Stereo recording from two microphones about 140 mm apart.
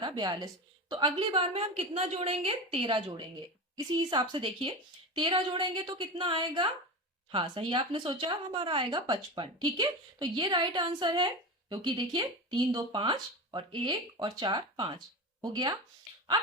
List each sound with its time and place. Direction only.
0.0 s a woman's voice: 30° right (ahead or behind)